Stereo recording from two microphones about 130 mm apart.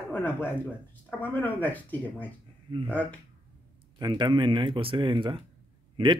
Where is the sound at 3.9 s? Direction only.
35° right (ahead or behind).